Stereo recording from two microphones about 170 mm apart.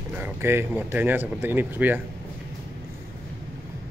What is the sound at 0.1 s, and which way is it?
Speech, 15° right (ahead or behind).